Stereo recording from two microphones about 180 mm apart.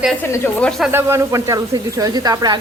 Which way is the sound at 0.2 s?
10° left (ahead or behind).